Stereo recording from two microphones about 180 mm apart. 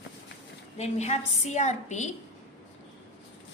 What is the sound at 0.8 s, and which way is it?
A woman's voice, 40° left (ahead or behind).